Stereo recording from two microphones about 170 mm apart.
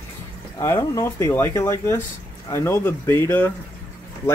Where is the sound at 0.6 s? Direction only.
15° left (ahead or behind).